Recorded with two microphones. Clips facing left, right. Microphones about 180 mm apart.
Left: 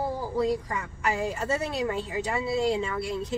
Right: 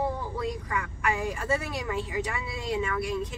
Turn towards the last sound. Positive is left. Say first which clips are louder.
# even
turn(degrees=25)  # may be behind; listen again after turning